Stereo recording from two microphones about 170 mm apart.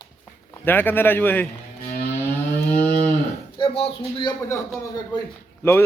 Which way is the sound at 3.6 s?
30° left (ahead or behind).